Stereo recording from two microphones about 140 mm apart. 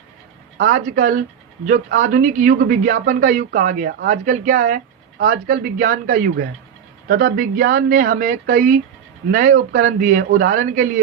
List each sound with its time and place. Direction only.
0.6 s speech: 70° right (ahead or behind)
5.2 s speech: 85° right; by 11.0 s 70° right (ahead or behind)